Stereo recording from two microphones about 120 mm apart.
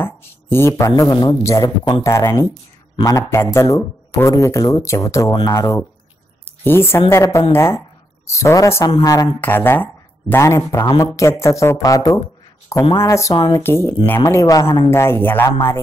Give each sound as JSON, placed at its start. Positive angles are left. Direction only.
{"t": 0.0, "sound": "speech", "side_deg": 20}
{"t": 8.8, "sound": "a woman's voice", "side_deg": 35}
{"t": 9.4, "sound": "speech", "side_deg": 20}